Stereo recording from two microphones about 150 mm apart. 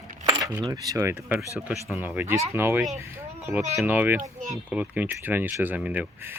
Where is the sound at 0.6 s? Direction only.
25° right (ahead or behind).